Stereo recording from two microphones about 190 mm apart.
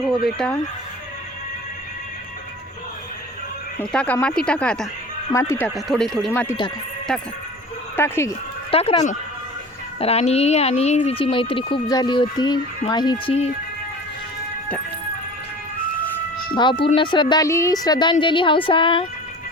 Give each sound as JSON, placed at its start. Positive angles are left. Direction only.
{"t": 0.3, "sound": "speech", "side_deg": 5}
{"t": 3.8, "sound": "speech", "side_deg": 10}
{"t": 7.9, "sound": "speech", "side_deg": 10}
{"t": 8.7, "sound": "speech", "side_deg": 30}
{"t": 10.0, "sound": "speech", "side_deg": 35}
{"t": 16.6, "sound": "speech", "side_deg": 25}